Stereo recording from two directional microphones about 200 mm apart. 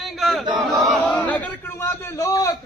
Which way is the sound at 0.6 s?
Centre (ahead or behind).